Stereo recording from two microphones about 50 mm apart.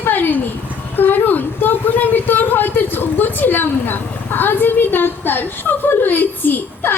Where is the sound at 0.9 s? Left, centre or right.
Left.